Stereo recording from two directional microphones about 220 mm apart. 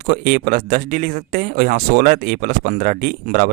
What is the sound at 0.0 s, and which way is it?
Speech, 40° right (ahead or behind).